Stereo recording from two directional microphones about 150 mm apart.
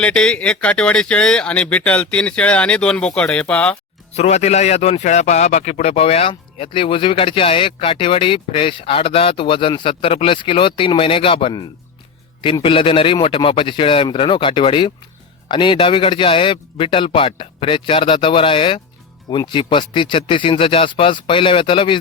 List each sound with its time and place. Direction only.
0.0 s speech: 5° left (ahead or behind)
4.1 s speech: 45° left (ahead or behind)